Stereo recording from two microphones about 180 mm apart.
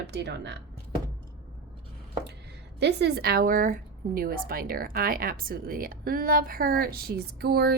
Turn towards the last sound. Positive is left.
turn(degrees=-60)  # may be behind; listen again after turning